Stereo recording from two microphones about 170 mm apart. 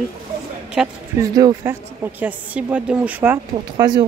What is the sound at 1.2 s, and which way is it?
A woman's voice, 20° right (ahead or behind).